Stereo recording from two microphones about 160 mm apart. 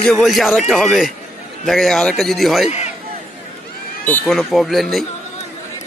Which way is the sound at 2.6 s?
40° left (ahead or behind).